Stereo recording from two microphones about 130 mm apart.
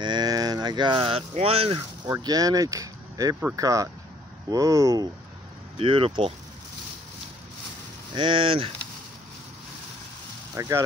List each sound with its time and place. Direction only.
0.0 s a sound: 35° right (ahead or behind)
1.3 s speech: 50° right (ahead or behind)
2.2 s speech: 30° right (ahead or behind)
5.8 s speech: 45° right (ahead or behind)
8.1 s speech: 40° right (ahead or behind)
10.5 s speech: 25° right (ahead or behind)